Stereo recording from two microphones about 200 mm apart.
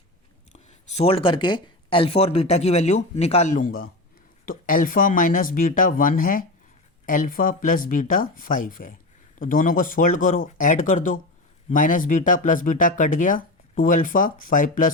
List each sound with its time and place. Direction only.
0.7 s speech: 30° left (ahead or behind)